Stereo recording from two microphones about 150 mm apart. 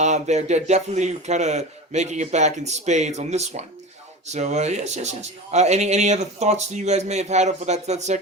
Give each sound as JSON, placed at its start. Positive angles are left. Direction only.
{"t": 0.0, "sound": "a man's voice", "side_deg": -50}